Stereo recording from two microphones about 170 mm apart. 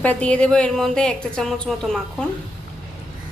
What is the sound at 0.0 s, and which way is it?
A woman's voice, 10° left (ahead or behind).